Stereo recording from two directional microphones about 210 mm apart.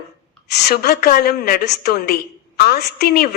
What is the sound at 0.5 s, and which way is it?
A woman's voice, 50° left (ahead or behind).